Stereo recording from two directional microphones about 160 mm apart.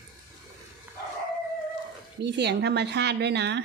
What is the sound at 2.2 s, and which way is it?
A woman's voice, 90° right.